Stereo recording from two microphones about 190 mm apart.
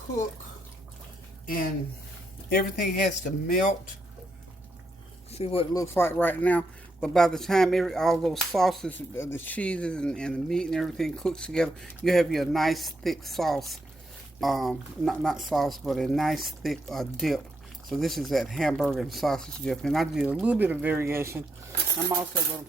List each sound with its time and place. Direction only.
1.5 s speech: 50° left (ahead or behind)
5.3 s speech: 30° left (ahead or behind)
5.7 s speech: 15° left (ahead or behind)
9.1 s speech: 15° left (ahead or behind); by 21.4 s 15° right (ahead or behind)